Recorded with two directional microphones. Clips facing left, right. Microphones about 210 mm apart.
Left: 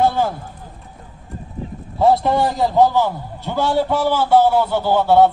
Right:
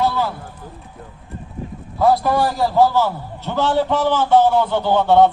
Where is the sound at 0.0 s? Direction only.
50° left (ahead or behind).